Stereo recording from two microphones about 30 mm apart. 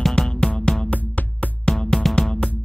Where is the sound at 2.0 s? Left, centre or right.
Centre.